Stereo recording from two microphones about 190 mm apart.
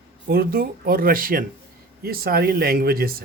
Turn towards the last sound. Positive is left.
turn(degrees=-50)  # may be behind; listen again after turning